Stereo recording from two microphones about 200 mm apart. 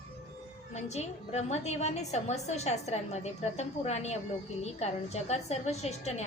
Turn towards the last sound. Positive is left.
turn(degrees=35)  # may be behind; listen again after turning